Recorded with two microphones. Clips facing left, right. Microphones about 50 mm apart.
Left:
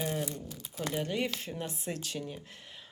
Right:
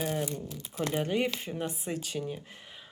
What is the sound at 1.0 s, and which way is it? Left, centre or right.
Speech, centre.